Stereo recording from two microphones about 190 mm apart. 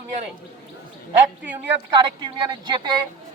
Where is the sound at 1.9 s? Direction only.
25° right (ahead or behind).